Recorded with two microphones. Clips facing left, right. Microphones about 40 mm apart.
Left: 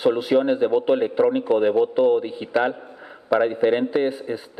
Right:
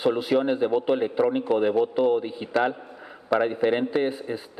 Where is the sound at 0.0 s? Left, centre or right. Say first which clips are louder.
Left 3 dB; centre.